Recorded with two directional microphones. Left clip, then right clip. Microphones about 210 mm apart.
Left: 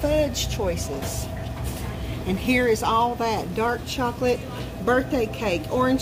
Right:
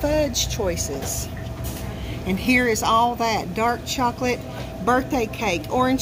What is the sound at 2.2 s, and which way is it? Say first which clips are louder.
A woman's voice: right 2 dB; 25° right (ahead or behind).